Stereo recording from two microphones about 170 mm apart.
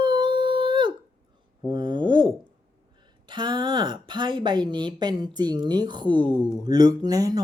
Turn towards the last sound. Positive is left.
turn(degrees=-20)  # may be behind; listen again after turning